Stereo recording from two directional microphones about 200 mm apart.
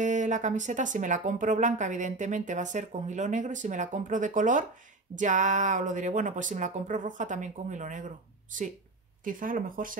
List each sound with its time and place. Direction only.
0.0 s speech: 35° right (ahead or behind)
9.2 s speech: 45° right (ahead or behind)